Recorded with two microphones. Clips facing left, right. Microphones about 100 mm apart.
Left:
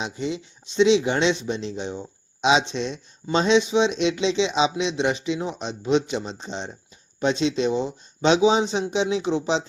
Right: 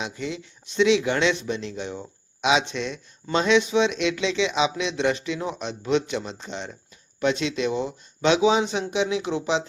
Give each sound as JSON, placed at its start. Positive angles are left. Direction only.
{"t": 0.0, "sound": "speech", "side_deg": 25}